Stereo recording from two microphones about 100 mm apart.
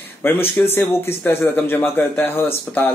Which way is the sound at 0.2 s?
20° left (ahead or behind).